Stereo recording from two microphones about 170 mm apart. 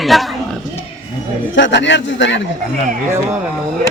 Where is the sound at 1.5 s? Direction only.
90° left.